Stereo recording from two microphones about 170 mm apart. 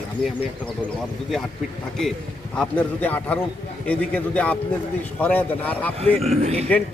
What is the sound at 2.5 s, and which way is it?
Speech, 5° left (ahead or behind).